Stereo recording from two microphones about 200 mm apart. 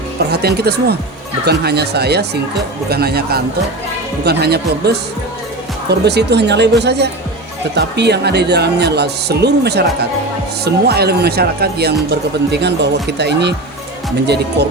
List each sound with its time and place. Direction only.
0.2 s a woman's voice: 55° right (ahead or behind)